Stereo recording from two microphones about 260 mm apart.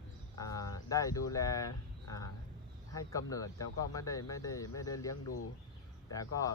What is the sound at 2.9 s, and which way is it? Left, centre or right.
Speech, centre.